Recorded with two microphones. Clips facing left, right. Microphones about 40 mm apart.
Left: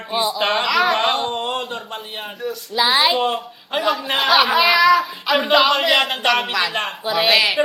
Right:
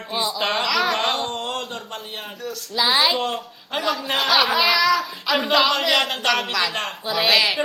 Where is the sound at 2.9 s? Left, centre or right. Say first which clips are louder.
Left 3 dB; centre.